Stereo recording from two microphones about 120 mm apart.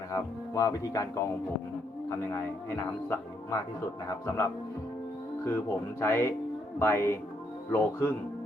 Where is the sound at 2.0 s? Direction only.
20° left (ahead or behind).